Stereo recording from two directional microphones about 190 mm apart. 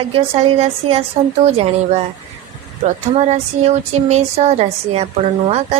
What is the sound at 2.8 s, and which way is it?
A woman's voice, 35° right (ahead or behind).